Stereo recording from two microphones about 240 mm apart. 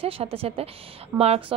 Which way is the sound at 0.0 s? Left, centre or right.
Right.